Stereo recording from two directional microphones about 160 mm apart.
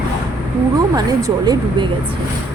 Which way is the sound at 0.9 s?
25° right (ahead or behind).